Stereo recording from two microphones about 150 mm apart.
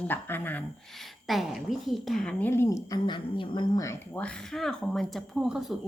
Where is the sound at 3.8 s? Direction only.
15° left (ahead or behind).